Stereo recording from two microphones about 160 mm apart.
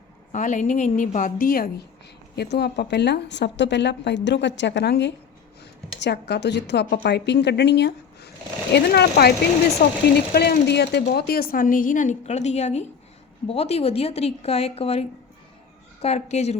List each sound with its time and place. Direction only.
0.3 s a woman's voice: 50° left (ahead or behind); by 1.8 s 65° left (ahead or behind)
2.3 s a woman's voice: 90° left
9.8 s speech: 65° left (ahead or behind)
10.3 s a woman's voice: 90° left; by 16.6 s 45° left (ahead or behind)